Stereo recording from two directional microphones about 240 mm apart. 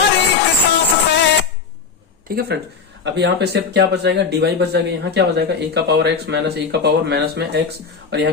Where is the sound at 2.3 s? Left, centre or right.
Right.